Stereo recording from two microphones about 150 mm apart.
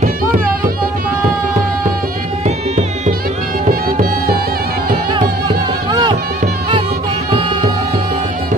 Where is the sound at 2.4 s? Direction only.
50° right (ahead or behind).